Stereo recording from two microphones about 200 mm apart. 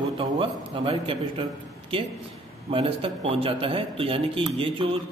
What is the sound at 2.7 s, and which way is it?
A man's voice, 25° right (ahead or behind).